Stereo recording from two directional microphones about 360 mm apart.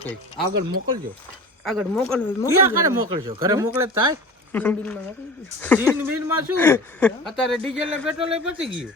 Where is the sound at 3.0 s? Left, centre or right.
Centre.